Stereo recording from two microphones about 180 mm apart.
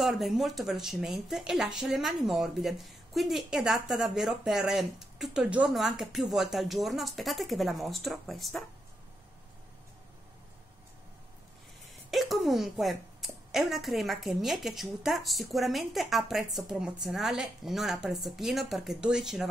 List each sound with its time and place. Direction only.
0.0 s speech: centre (ahead or behind)
12.1 s speech: centre (ahead or behind)